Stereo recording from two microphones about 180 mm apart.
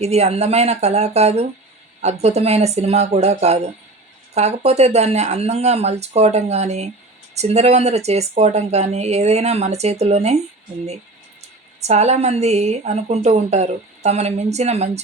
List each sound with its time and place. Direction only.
0.0 s speech: 35° right (ahead or behind)
11.8 s speech: 40° right (ahead or behind)